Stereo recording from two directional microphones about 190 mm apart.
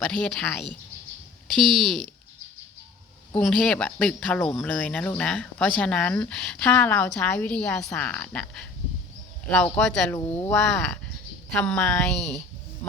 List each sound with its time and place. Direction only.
0.0 s speech: 5° left (ahead or behind)
1.5 s speech: centre (ahead or behind)
3.3 s speech: centre (ahead or behind)